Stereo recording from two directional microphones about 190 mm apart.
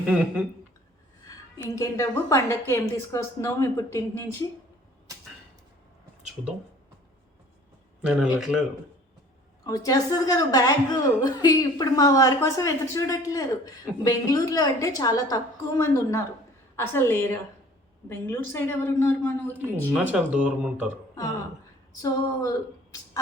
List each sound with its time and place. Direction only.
0.0 s speech: 5° right (ahead or behind)
1.7 s a woman's voice: 15° left (ahead or behind)
8.0 s speech: 5° right (ahead or behind)
9.6 s a woman's voice: 20° left (ahead or behind)
20.0 s speech: 5° right (ahead or behind)
22.0 s a woman's voice: 15° left (ahead or behind)